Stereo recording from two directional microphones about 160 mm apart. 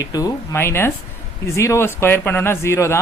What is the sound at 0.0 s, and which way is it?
Speech, 20° left (ahead or behind).